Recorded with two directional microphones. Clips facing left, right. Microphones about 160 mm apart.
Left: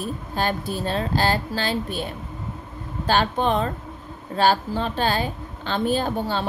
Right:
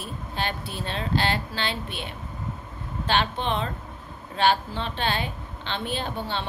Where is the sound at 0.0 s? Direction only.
40° left (ahead or behind).